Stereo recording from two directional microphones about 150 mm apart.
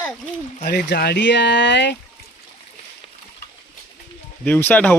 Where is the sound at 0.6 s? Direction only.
90° left.